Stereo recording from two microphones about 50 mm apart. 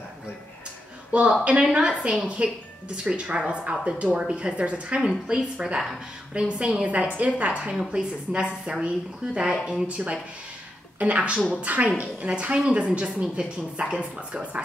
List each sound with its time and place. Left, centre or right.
1.1 s a woman's voice: right